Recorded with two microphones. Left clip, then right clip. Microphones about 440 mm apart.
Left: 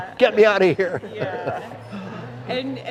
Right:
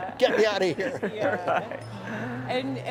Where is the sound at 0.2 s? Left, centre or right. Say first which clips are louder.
Left 7 dB; left.